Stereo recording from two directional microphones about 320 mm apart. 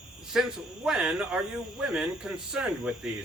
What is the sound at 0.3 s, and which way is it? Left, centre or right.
Speech, centre.